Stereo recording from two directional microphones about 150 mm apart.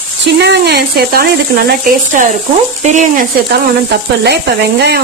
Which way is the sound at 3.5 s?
90° right.